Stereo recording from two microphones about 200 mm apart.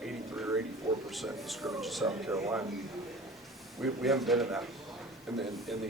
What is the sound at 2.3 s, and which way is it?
Speech, 15° right (ahead or behind).